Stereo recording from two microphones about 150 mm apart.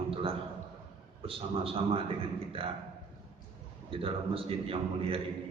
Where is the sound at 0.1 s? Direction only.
35° right (ahead or behind).